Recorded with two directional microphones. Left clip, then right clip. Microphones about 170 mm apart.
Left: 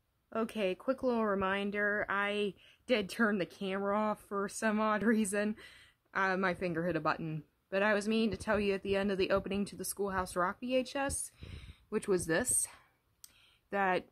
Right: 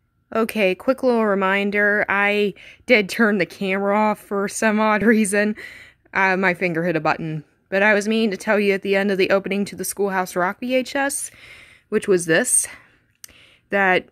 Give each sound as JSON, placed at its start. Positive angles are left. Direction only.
{"t": 0.3, "sound": "speech", "side_deg": -25}